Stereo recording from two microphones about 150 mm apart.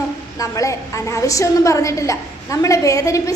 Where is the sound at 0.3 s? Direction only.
20° left (ahead or behind).